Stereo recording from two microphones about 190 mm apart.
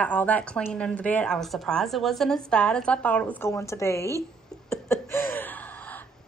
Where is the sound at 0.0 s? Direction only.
10° left (ahead or behind).